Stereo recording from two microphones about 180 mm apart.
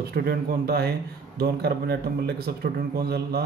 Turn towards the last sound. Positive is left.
turn(degrees=-60)  # may be behind; listen again after turning